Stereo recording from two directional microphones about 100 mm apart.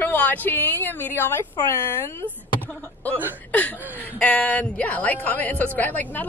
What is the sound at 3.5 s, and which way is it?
A woman's voice, 15° left (ahead or behind).